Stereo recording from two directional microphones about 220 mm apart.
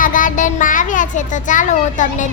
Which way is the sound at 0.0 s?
35° left (ahead or behind).